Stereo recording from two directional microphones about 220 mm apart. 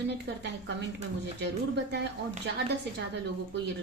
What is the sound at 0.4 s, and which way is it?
A woman's voice, 50° right (ahead or behind).